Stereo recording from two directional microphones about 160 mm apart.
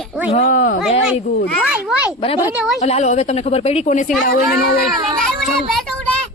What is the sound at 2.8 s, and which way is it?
A woman's voice, 45° left (ahead or behind).